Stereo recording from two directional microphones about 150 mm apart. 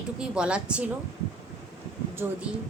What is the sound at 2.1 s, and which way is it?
Speech, 15° right (ahead or behind).